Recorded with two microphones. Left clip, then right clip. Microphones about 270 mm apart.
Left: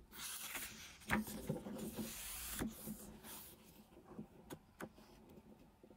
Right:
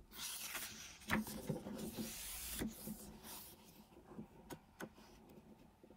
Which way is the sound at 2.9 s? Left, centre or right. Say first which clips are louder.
Even; right.